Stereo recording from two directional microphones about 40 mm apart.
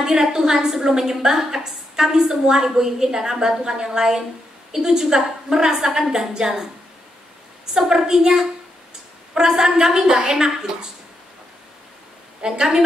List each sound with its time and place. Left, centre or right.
0.0 s a woman's voice: centre
7.7 s a woman's voice: centre
12.4 s a woman's voice: centre